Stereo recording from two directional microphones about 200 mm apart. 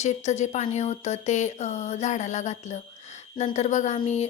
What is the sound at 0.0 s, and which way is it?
Speech, 35° left (ahead or behind).